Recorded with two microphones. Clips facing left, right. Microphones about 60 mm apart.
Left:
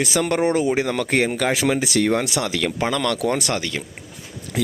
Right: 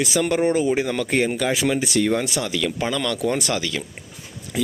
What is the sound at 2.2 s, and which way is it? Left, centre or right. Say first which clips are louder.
Speech: left 1 dB; left.